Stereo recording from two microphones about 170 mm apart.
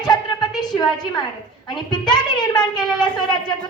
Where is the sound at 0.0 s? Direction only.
25° left (ahead or behind).